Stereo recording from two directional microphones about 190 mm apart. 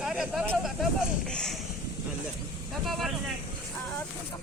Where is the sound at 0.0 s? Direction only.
5° right (ahead or behind).